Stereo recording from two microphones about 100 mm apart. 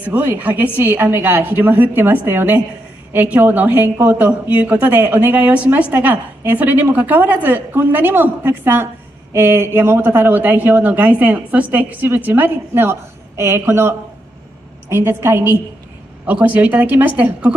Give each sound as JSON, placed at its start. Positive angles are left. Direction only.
{"t": 0.0, "sound": "a woman's voice", "side_deg": -20}